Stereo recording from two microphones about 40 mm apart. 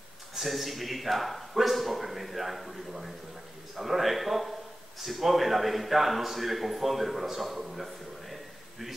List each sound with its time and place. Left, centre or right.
0.3 s a man's voice: centre